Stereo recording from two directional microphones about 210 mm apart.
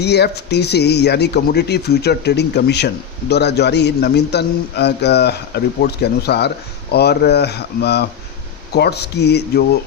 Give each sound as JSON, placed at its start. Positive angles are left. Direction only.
{"t": 0.0, "sound": "speech", "side_deg": 50}